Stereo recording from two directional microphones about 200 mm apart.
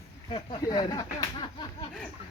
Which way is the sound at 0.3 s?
25° left (ahead or behind).